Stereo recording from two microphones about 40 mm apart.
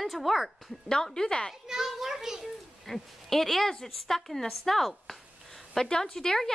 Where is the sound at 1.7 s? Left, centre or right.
Centre.